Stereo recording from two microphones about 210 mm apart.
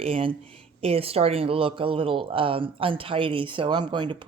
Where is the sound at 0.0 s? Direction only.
25° right (ahead or behind).